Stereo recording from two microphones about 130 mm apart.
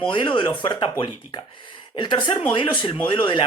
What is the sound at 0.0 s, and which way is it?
Speech, 40° left (ahead or behind).